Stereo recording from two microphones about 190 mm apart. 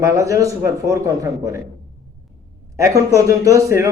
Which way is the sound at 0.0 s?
15° right (ahead or behind).